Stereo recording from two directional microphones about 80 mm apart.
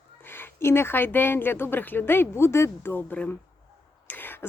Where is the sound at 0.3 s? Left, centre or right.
Left.